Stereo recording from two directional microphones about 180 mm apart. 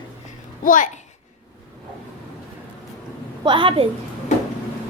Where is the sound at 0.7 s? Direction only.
45° left (ahead or behind).